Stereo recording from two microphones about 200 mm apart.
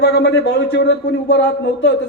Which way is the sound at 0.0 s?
55° left (ahead or behind).